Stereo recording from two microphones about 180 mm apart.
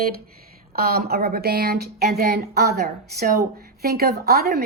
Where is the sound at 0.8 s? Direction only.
55° right (ahead or behind).